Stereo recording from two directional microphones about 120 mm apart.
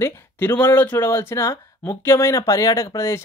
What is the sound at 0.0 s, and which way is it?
Speech, 20° left (ahead or behind).